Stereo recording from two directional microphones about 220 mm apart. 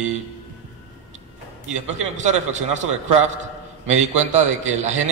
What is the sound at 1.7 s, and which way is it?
Speech, 35° right (ahead or behind).